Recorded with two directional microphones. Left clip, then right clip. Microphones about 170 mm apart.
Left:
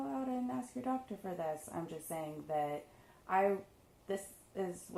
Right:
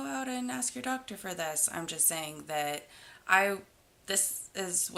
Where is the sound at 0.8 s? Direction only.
25° right (ahead or behind).